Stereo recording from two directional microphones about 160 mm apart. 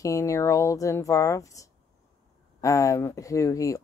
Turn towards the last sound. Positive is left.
turn(degrees=20)  # may be behind; listen again after turning